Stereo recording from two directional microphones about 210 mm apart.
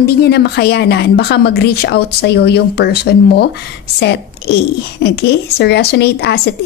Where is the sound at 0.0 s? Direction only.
50° left (ahead or behind).